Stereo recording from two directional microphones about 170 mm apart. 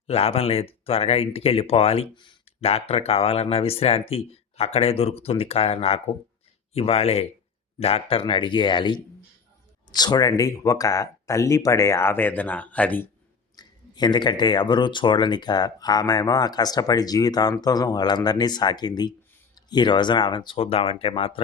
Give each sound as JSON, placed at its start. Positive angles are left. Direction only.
{"t": 0.1, "sound": "speech", "side_deg": 35}
{"t": 13.6, "sound": "speech", "side_deg": 25}